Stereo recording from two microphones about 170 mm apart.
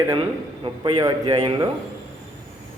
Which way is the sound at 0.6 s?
25° right (ahead or behind).